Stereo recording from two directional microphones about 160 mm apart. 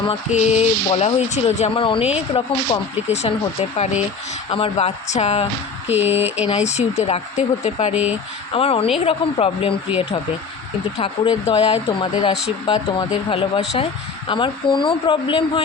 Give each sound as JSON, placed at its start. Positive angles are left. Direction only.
{"t": 0.0, "sound": "speech", "side_deg": 40}
{"t": 4.4, "sound": "speech", "side_deg": 35}
{"t": 5.9, "sound": "speech", "side_deg": -10}
{"t": 6.5, "sound": "speech", "side_deg": 45}
{"t": 10.9, "sound": "speech", "side_deg": 30}